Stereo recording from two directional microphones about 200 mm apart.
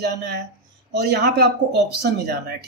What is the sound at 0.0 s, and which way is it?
Speech, 55° right (ahead or behind).